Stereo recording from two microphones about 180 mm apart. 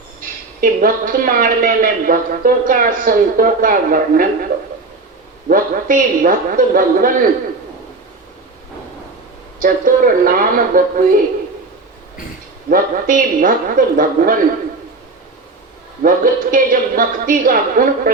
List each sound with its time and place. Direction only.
0.2 s a woman's voice: 50° right (ahead or behind)
5.5 s a woman's voice: 50° right (ahead or behind)
9.6 s a woman's voice: 50° right (ahead or behind)
12.7 s a woman's voice: 50° right (ahead or behind)
16.0 s a woman's voice: 50° right (ahead or behind)